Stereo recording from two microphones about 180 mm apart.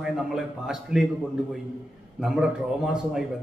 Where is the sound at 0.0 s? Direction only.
5° right (ahead or behind).